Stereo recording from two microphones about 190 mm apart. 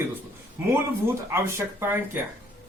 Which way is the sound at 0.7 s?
15° right (ahead or behind).